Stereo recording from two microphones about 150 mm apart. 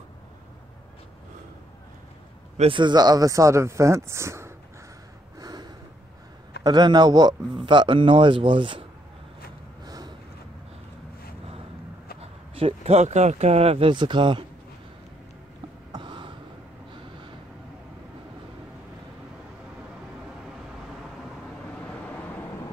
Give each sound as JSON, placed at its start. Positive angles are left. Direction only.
{"t": 2.5, "sound": "speech", "side_deg": -40}
{"t": 5.4, "sound": "snort", "side_deg": -25}
{"t": 6.6, "sound": "a man's voice", "side_deg": -30}
{"t": 9.8, "sound": "a sound", "side_deg": -25}
{"t": 12.2, "sound": "speech", "side_deg": -40}
{"t": 15.9, "sound": "a sound", "side_deg": -30}